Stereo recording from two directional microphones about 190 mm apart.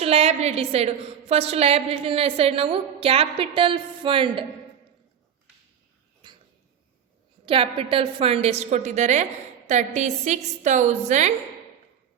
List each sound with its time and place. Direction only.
0.0 s a woman's voice: 30° right (ahead or behind)
6.2 s a sound: 25° right (ahead or behind)
7.4 s a woman's voice: 30° right (ahead or behind)